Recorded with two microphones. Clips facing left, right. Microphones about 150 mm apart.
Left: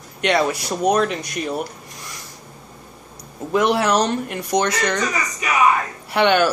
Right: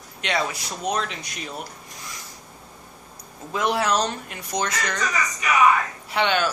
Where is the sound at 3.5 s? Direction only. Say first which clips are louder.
Left 5 dB; 65° left (ahead or behind).